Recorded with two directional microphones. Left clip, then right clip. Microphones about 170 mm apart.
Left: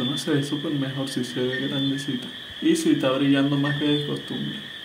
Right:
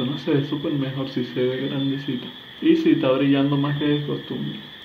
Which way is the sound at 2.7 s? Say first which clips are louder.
Right 3 dB; 15° left (ahead or behind).